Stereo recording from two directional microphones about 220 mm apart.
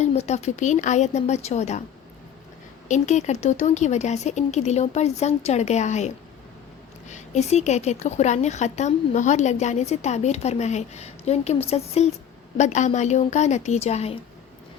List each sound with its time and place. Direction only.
0.0 s a woman's voice: 30° left (ahead or behind)
2.9 s a woman's voice: 30° left (ahead or behind)